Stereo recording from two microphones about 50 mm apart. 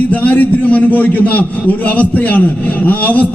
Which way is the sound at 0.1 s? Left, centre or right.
Left.